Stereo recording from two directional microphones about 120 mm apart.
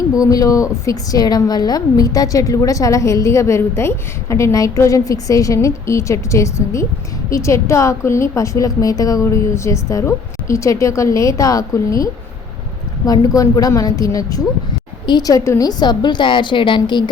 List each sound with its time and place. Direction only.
0.1 s a woman's voice: 30° left (ahead or behind)
13.1 s a woman's voice: 30° left (ahead or behind)